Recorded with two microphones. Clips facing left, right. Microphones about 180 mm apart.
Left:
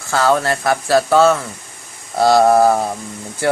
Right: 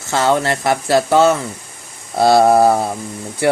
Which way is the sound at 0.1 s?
20° right (ahead or behind).